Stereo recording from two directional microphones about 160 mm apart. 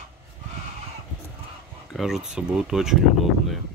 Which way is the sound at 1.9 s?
Centre (ahead or behind).